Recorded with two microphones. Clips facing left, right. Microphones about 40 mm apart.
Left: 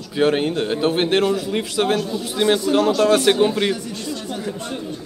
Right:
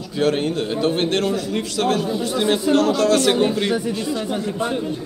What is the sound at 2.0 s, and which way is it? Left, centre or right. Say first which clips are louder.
Speech: right 2 dB; centre.